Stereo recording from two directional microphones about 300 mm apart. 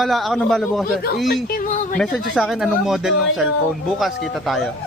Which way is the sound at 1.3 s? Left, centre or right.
Left.